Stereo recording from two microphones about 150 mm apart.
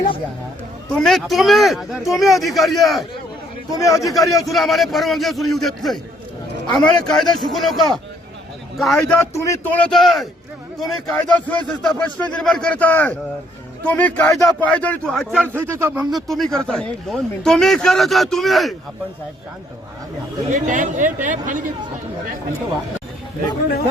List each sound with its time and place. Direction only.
0.9 s speech: 5° left (ahead or behind)
3.8 s a man's voice: 20° left (ahead or behind)
4.4 s a man's voice: centre (ahead or behind); by 9.6 s 20° left (ahead or behind)
9.7 s a man's voice: 5° left (ahead or behind)
15.5 s speech: 15° right (ahead or behind)
16.1 s speech: centre (ahead or behind)
20.5 s speech: 60° right (ahead or behind)